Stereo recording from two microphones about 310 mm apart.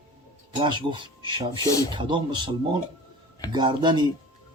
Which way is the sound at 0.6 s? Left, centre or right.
Centre.